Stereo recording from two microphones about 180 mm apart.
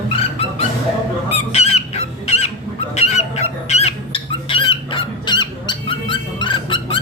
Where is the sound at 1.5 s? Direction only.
35° left (ahead or behind).